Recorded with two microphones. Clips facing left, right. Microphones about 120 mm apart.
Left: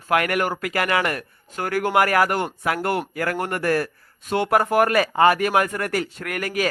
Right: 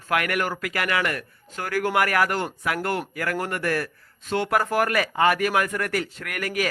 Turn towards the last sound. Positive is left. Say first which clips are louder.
# left 2 dB
turn(degrees=30)  # may be behind; listen again after turning